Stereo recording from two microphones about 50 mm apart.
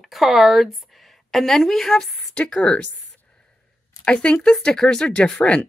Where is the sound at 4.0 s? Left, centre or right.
Centre.